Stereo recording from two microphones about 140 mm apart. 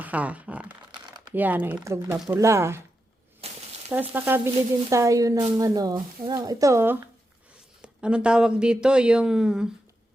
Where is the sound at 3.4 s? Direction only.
45° right (ahead or behind).